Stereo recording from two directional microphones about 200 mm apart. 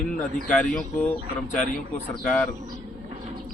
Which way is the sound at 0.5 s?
5° left (ahead or behind).